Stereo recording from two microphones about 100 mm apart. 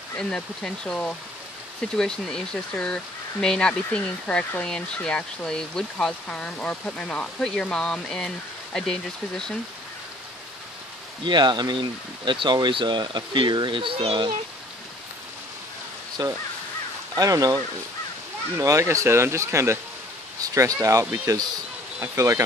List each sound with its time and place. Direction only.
0.3 s speech: 10° left (ahead or behind)
11.2 s speech: 50° right (ahead or behind)
16.2 s speech: 40° right (ahead or behind)
18.6 s speech: 30° right (ahead or behind)